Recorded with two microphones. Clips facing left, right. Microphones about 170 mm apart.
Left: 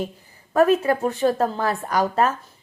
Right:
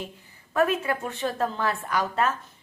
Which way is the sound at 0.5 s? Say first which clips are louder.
Left 7 dB; 40° left (ahead or behind).